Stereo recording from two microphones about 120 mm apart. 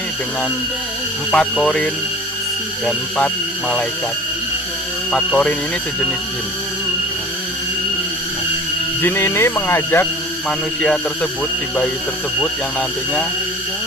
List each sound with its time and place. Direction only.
1.3 s speech: 5° left (ahead or behind)
5.1 s speech: 5° left (ahead or behind)
9.0 s speech: 20° left (ahead or behind)